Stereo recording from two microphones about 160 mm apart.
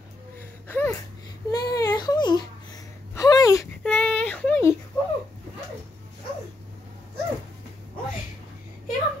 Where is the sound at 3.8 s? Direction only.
10° left (ahead or behind).